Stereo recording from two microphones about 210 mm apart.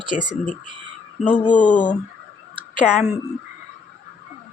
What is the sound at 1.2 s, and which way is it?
Speech, 5° left (ahead or behind).